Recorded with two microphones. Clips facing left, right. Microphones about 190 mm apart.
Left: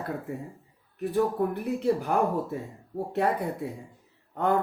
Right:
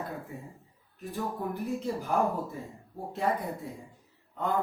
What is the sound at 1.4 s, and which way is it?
Speech, 65° left (ahead or behind).